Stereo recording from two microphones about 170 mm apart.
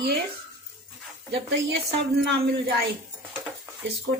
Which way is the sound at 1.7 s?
90° right.